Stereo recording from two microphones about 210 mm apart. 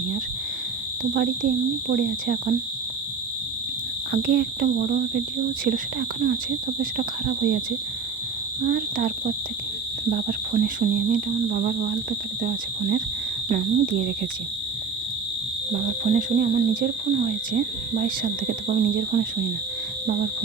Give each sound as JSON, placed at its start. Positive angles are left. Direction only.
{"t": 1.1, "sound": "speech", "side_deg": -45}
{"t": 4.1, "sound": "speech", "side_deg": -45}
{"t": 8.6, "sound": "speech", "side_deg": -45}
{"t": 15.7, "sound": "speech", "side_deg": -40}